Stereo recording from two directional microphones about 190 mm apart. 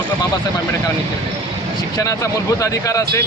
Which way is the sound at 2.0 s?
15° left (ahead or behind).